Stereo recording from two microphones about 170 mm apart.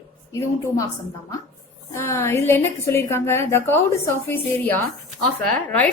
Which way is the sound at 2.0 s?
15° left (ahead or behind).